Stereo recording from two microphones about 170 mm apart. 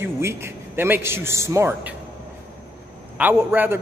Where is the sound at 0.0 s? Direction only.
15° right (ahead or behind).